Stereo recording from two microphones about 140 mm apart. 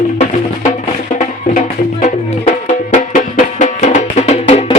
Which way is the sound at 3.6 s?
60° left (ahead or behind).